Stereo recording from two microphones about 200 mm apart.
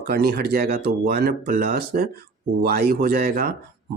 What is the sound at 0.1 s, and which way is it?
Speech, 50° right (ahead or behind).